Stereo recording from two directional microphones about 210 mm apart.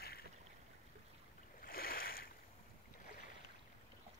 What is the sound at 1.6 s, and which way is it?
Boat, 45° left (ahead or behind).